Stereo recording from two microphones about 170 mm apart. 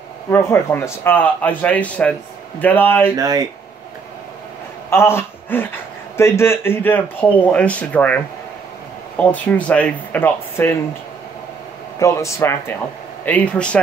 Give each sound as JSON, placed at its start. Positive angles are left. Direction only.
{"t": 0.3, "sound": "speech", "side_deg": 15}
{"t": 3.2, "sound": "speech", "side_deg": -20}
{"t": 4.8, "sound": "speech", "side_deg": 15}
{"t": 9.2, "sound": "speech", "side_deg": 10}
{"t": 12.0, "sound": "speech", "side_deg": 20}